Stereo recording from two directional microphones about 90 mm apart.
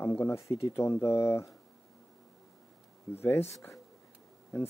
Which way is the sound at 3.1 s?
25° left (ahead or behind).